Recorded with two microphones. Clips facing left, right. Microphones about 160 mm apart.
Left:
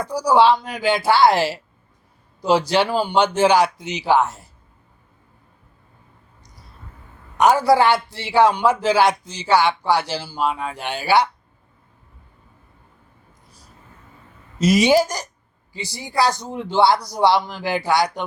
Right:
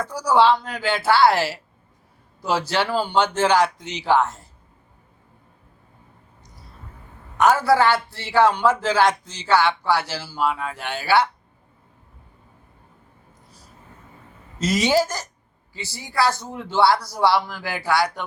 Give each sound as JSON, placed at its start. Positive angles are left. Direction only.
{"t": 0.0, "sound": "a man's voice", "side_deg": 15}
{"t": 7.3, "sound": "a man's voice", "side_deg": 15}
{"t": 14.6, "sound": "a man's voice", "side_deg": 15}